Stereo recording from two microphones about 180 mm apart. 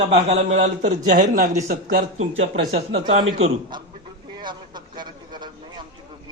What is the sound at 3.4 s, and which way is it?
Speech, 25° right (ahead or behind).